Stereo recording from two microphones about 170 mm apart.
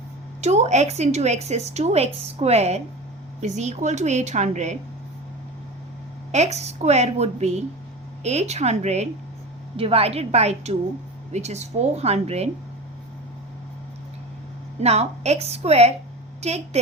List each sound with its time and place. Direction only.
0.4 s a woman's voice: 40° right (ahead or behind)
6.3 s a woman's voice: 40° right (ahead or behind)
14.8 s a woman's voice: 40° right (ahead or behind)